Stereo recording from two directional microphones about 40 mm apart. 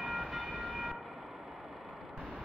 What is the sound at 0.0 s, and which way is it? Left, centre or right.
Train, centre.